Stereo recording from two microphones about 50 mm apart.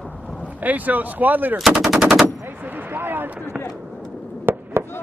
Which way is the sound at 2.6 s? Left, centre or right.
Right.